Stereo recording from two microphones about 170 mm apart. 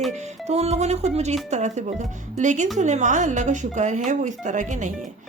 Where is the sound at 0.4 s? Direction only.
40° right (ahead or behind).